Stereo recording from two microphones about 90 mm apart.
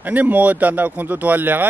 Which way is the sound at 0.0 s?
20° right (ahead or behind).